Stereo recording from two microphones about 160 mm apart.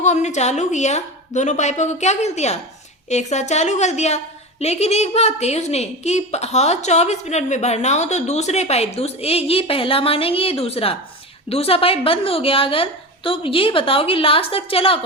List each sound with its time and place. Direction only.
0.0 s a woman's voice: 45° left (ahead or behind)